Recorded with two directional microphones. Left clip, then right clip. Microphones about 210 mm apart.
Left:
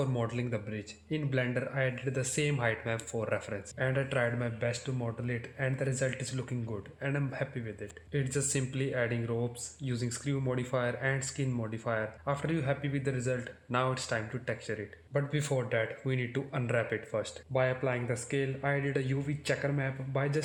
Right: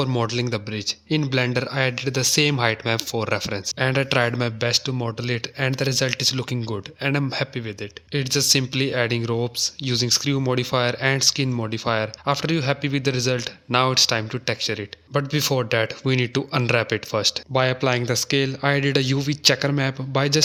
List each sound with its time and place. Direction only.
0.0 s speech: 50° right (ahead or behind)